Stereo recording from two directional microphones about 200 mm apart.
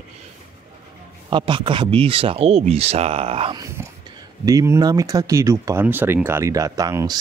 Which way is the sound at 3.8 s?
10° right (ahead or behind).